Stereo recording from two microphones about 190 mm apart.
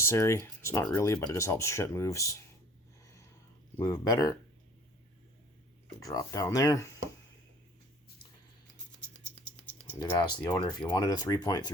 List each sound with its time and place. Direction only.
0.0 s speech: 15° left (ahead or behind)
3.8 s speech: 15° left (ahead or behind)
6.0 s speech: 15° left (ahead or behind)
9.6 s rattle: 10° left (ahead or behind)
10.0 s speech: 25° left (ahead or behind)